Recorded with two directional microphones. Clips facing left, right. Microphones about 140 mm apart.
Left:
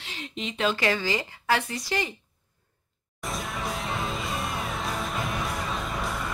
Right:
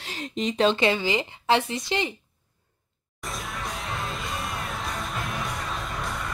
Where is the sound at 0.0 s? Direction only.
40° right (ahead or behind).